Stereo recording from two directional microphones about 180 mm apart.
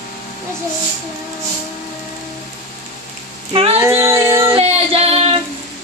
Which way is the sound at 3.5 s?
30° right (ahead or behind).